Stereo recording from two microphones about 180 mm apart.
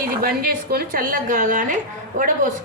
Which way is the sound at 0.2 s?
55° right (ahead or behind).